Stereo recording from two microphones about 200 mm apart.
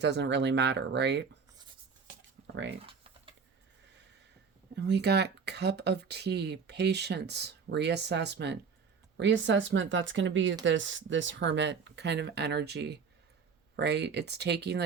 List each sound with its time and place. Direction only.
0.0 s speech: 60° right (ahead or behind)
2.8 s typing: 25° right (ahead or behind)
4.7 s speech: 55° right (ahead or behind)